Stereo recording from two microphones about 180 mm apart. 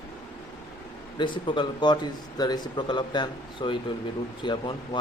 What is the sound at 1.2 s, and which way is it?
Speech, 25° left (ahead or behind).